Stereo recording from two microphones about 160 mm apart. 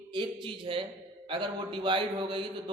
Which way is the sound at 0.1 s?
30° right (ahead or behind).